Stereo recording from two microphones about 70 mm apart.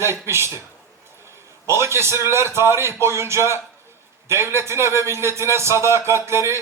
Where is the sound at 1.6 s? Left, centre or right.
Right.